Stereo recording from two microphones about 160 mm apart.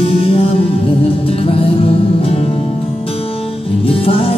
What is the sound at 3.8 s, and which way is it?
Music, 35° left (ahead or behind).